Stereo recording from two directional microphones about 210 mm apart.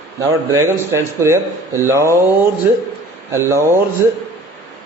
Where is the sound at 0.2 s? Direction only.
15° right (ahead or behind).